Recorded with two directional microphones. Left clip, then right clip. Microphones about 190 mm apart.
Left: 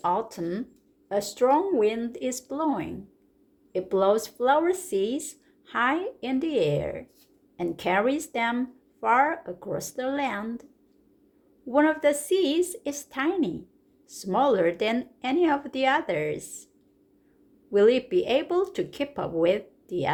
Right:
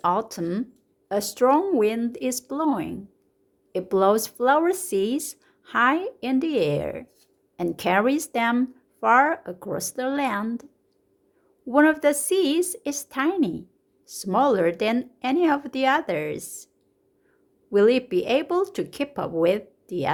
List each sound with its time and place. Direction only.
0.0 s speech: 25° right (ahead or behind)
11.7 s speech: 25° right (ahead or behind)
17.7 s speech: 20° right (ahead or behind)